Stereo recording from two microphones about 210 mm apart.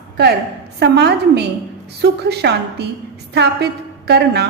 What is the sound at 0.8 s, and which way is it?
A woman's voice, 50° right (ahead or behind).